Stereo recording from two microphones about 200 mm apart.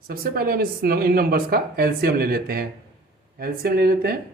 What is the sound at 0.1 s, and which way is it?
Speech, 50° right (ahead or behind).